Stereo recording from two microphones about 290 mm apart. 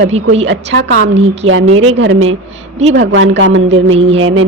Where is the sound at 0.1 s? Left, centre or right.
Right.